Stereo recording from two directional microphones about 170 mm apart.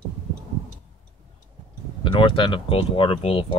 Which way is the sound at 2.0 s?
30° left (ahead or behind).